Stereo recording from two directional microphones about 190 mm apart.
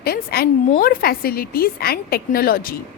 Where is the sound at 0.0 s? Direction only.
55° left (ahead or behind).